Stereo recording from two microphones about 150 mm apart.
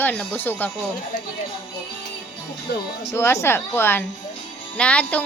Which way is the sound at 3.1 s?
15° left (ahead or behind).